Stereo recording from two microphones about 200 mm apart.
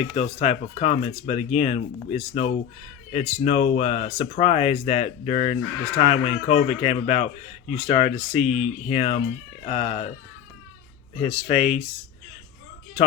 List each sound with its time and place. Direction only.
0.1 s speech: 35° left (ahead or behind)
11.3 s speech: 25° left (ahead or behind)